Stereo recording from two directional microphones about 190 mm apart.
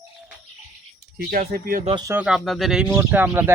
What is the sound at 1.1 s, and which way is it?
Speech, 55° right (ahead or behind).